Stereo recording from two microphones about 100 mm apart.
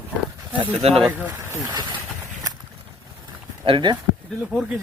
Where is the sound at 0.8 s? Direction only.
90° right.